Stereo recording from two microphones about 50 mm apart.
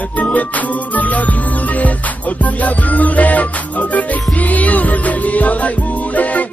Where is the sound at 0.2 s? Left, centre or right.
Left.